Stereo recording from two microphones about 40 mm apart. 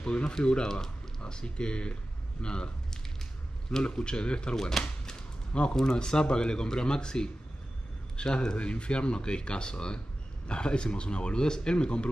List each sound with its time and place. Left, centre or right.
0.0 s a man's voice: left
3.8 s speech: left
4.6 s speech: centre
5.5 s a man's voice: left
8.5 s speech: left